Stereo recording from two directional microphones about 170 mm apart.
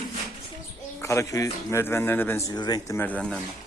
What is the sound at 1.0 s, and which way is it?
A man's voice, 15° left (ahead or behind).